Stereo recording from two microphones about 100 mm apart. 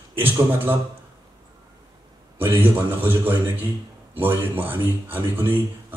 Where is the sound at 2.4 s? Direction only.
20° right (ahead or behind).